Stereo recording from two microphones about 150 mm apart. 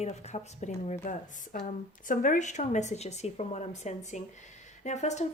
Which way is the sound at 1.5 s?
60° left (ahead or behind).